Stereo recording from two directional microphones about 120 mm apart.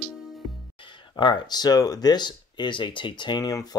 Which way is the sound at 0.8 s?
45° left (ahead or behind).